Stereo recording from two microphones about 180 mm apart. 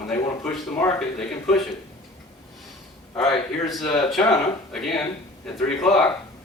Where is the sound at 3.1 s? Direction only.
Centre (ahead or behind).